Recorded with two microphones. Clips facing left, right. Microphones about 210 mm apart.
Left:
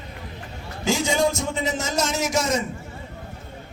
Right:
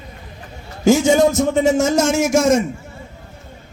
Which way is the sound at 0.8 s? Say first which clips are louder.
Right 9 dB; 50° right (ahead or behind).